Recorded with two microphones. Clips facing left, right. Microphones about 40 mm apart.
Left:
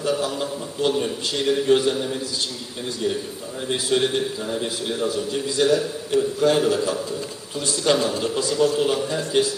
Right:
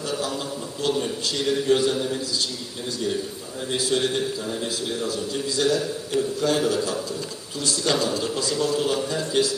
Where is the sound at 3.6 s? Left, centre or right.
Centre.